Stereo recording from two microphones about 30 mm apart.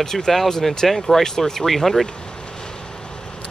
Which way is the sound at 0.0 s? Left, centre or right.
Centre.